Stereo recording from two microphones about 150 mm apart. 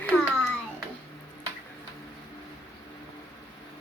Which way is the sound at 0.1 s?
15° left (ahead or behind).